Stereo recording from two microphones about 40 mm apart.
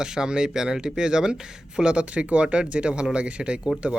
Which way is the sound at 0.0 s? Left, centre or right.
Centre.